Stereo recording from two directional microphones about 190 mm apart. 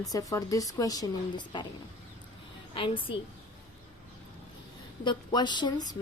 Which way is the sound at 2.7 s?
25° left (ahead or behind).